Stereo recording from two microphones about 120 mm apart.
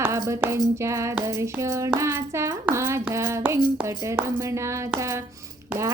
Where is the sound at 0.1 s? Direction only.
25° right (ahead or behind).